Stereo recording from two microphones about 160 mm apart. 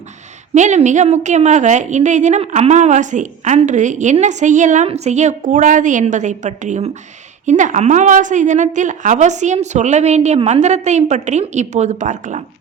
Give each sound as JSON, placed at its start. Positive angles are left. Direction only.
{"t": 0.5, "sound": "a woman's voice", "side_deg": -45}